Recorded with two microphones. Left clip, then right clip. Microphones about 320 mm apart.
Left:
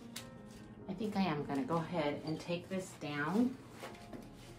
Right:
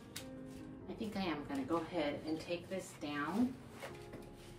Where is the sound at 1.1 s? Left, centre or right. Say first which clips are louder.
Left 4 dB; centre.